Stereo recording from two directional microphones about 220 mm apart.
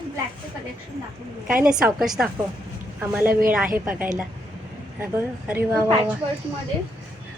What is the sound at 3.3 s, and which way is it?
Speech, 40° right (ahead or behind).